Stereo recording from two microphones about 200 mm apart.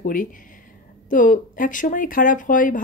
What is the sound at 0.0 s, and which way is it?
Speech, 40° left (ahead or behind).